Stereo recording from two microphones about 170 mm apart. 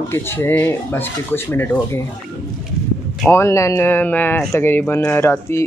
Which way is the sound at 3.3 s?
15° left (ahead or behind).